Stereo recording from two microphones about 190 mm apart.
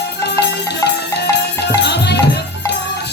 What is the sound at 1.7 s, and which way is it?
Music, 60° left (ahead or behind).